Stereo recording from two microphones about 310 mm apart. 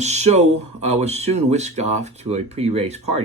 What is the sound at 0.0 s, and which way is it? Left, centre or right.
Speech, right.